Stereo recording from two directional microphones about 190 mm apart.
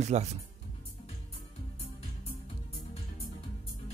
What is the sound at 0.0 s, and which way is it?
Speech, 35° right (ahead or behind).